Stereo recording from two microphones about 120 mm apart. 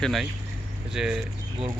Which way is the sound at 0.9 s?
5° right (ahead or behind).